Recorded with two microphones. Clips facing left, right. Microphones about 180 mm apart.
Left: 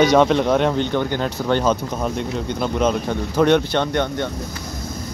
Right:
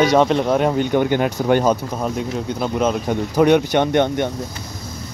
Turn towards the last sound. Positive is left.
turn(degrees=-20)  # may be behind; listen again after turning